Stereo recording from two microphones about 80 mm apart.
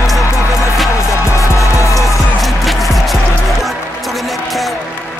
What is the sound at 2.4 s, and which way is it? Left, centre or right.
Music, centre.